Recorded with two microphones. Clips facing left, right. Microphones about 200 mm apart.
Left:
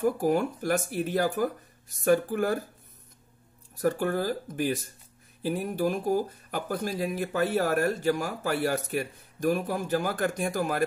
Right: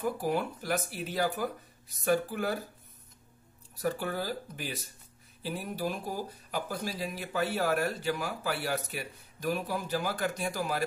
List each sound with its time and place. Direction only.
0.0 s speech: 45° left (ahead or behind)
3.7 s speech: 50° left (ahead or behind)